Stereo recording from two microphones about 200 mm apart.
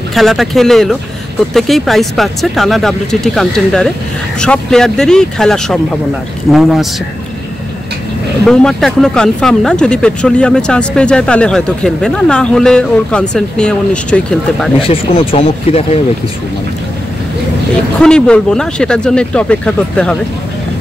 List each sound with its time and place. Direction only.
0.1 s speech: centre (ahead or behind)
8.5 s speech: centre (ahead or behind)
14.8 s speech: 30° left (ahead or behind)
18.0 s speech: 5° left (ahead or behind)